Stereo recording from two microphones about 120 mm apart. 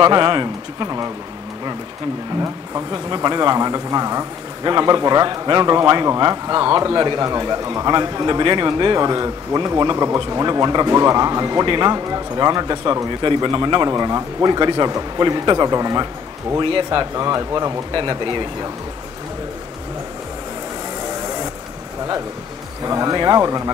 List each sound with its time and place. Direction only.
0.0 s a man's voice: 40° right (ahead or behind)
3.3 s a man's voice: 35° right (ahead or behind)
16.5 s speech: 45° right (ahead or behind)
17.1 s a man's voice: 30° right (ahead or behind)
22.8 s speech: 30° right (ahead or behind)